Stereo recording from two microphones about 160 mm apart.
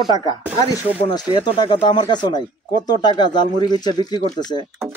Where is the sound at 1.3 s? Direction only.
30° left (ahead or behind).